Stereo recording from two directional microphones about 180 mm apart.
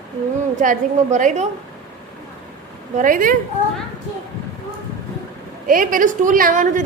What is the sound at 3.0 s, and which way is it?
Speech, 50° right (ahead or behind).